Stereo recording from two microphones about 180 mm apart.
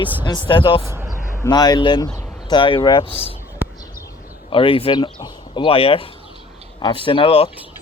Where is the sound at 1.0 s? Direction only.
Centre (ahead or behind).